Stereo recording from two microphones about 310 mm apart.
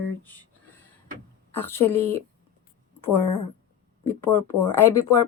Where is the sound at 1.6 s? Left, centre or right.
Centre.